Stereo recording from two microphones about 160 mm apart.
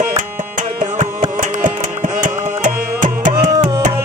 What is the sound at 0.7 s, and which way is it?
Carnatic music, 50° right (ahead or behind).